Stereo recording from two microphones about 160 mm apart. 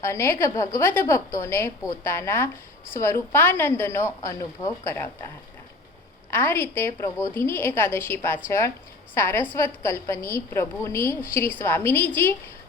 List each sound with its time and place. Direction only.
0.0 s a woman's voice: 15° left (ahead or behind)
6.3 s a woman's voice: 10° left (ahead or behind)